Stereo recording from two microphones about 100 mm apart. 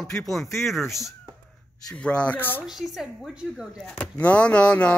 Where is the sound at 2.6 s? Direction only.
5° right (ahead or behind).